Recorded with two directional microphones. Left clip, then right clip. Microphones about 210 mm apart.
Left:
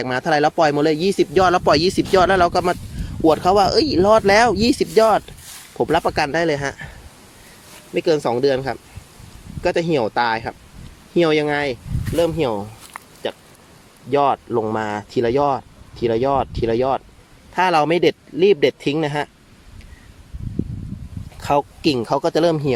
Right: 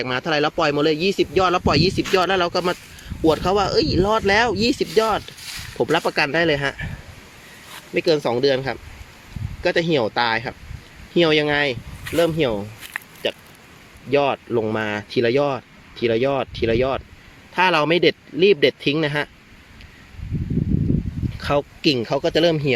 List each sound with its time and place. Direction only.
0.0 s speech: 20° left (ahead or behind)
5.7 s speech: 10° left (ahead or behind)
7.9 s speech: 5° left (ahead or behind)
14.1 s speech: centre (ahead or behind)
21.4 s speech: 10° left (ahead or behind)